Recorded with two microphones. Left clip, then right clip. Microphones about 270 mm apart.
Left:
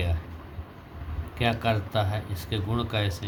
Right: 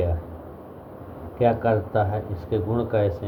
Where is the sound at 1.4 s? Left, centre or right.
Left.